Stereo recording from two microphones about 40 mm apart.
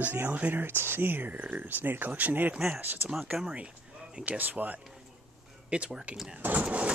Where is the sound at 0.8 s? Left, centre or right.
Right.